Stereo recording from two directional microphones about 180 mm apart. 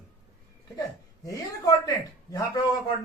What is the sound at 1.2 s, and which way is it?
A man's voice, 20° left (ahead or behind).